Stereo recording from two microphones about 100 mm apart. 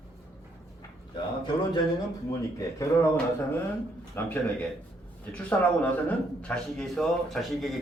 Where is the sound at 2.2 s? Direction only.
35° left (ahead or behind).